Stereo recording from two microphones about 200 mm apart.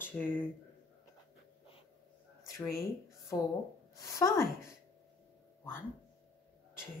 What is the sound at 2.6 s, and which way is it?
Speech, 15° left (ahead or behind).